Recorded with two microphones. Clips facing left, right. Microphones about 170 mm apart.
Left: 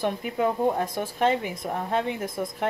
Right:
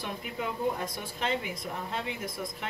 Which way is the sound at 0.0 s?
50° left (ahead or behind).